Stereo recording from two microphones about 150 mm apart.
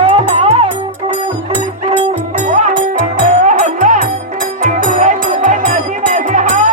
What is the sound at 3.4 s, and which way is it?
Music, 55° right (ahead or behind).